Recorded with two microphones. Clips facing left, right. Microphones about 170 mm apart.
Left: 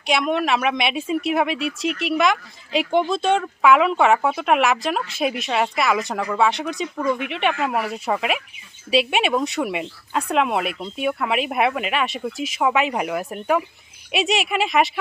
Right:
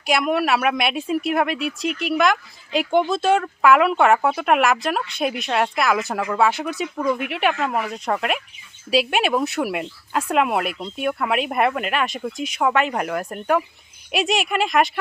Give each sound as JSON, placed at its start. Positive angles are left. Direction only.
{"t": 0.1, "sound": "a woman's voice", "side_deg": -5}